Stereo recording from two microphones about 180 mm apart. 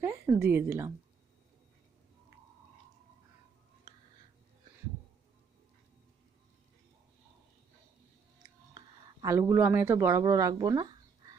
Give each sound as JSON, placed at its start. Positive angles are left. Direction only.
{"t": 0.0, "sound": "speech", "side_deg": -15}
{"t": 3.9, "sound": "a sound", "side_deg": -20}
{"t": 9.2, "sound": "speech", "side_deg": -15}